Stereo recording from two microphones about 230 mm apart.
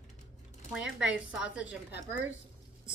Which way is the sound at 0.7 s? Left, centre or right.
Centre.